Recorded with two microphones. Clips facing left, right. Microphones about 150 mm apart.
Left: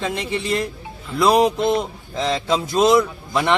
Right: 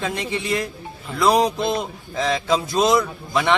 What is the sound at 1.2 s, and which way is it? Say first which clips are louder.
A man's voice: left 2 dB; 5° left (ahead or behind).